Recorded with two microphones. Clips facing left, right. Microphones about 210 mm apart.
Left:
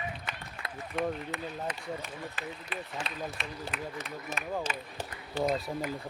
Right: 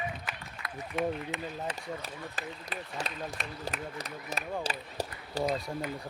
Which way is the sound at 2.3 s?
40° right (ahead or behind).